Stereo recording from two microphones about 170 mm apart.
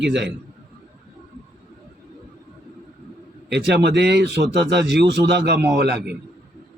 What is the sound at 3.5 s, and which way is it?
A man's voice, 80° right.